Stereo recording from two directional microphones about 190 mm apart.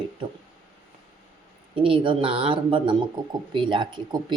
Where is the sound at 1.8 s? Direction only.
25° right (ahead or behind).